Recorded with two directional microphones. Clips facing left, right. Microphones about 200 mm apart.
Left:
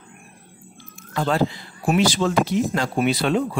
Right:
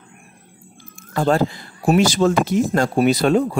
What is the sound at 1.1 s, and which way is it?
A man's voice, 45° right (ahead or behind).